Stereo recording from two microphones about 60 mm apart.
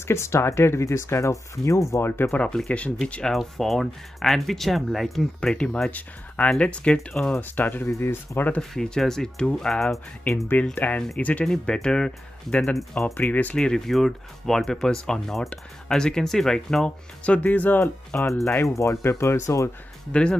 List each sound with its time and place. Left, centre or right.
0.0 s speech: left
2.0 s speech: left
2.3 s speech: left; by 5.5 s centre
5.5 s speech: centre
7.3 s speech: left
8.5 s speech: centre
10.6 s speech: left
11.4 s speech: centre
13.0 s speech: left
13.6 s speech: centre
17.2 s speech: left
18.5 s speech: left
20.1 s speech: centre